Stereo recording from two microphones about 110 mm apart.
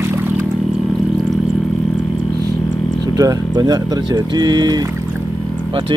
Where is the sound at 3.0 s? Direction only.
35° right (ahead or behind).